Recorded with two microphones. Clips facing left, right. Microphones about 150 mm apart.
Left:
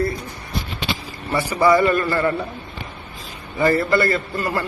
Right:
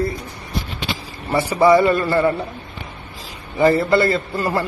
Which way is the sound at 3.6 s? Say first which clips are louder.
Right 3 dB; 20° right (ahead or behind).